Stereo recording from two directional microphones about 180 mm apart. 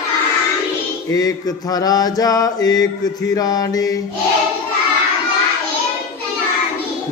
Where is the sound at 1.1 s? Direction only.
20° left (ahead or behind).